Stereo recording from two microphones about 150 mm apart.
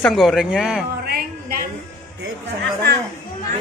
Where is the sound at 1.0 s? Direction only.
90° right.